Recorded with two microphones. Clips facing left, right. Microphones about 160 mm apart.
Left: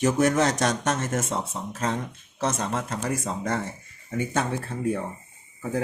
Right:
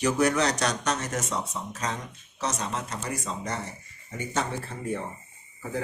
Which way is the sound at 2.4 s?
55° left (ahead or behind).